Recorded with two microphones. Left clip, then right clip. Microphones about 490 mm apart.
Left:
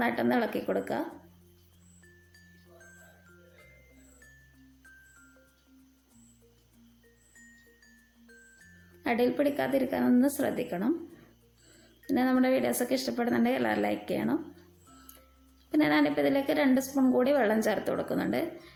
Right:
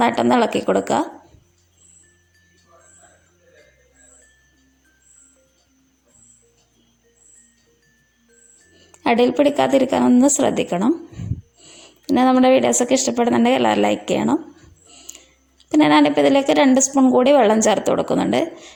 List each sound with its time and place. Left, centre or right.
0.0 s a woman's voice: right
9.0 s a woman's voice: right
12.0 s a woman's voice: right
15.7 s a woman's voice: right